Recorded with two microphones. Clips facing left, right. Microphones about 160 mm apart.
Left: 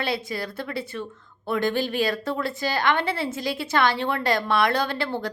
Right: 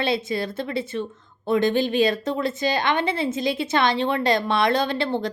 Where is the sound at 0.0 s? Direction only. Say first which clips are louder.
Right 4 dB; 25° right (ahead or behind).